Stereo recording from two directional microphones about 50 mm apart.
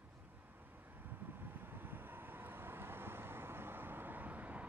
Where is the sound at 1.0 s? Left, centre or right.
Right.